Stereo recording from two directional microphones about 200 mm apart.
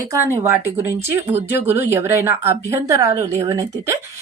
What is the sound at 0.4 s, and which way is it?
A woman's voice, 10° right (ahead or behind).